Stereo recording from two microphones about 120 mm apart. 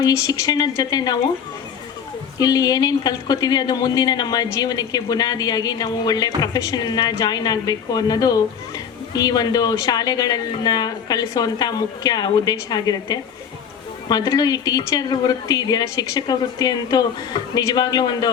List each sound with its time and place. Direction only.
0.0 s speech: 30° left (ahead or behind)
2.4 s speech: 35° left (ahead or behind)